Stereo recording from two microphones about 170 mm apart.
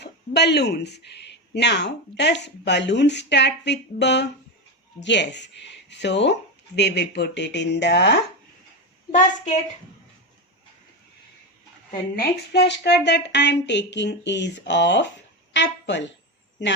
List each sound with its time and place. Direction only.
0.0 s speech: 75° left (ahead or behind)
9.1 s speech: 45° left (ahead or behind)
12.5 s speech: 85° left